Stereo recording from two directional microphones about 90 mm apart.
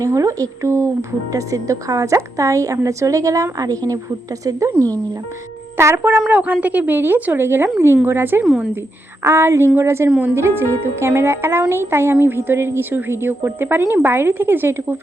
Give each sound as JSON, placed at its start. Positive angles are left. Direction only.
{"t": 0.0, "sound": "a woman's voice", "side_deg": -35}
{"t": 8.4, "sound": "speech", "side_deg": -5}
{"t": 9.2, "sound": "a woman's voice", "side_deg": -30}